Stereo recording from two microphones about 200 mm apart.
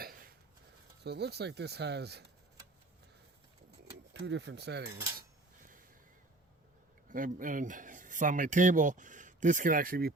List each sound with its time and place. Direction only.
1.0 s speech: 55° right (ahead or behind)
4.1 s speech: 60° right (ahead or behind)
7.1 s speech: 45° right (ahead or behind)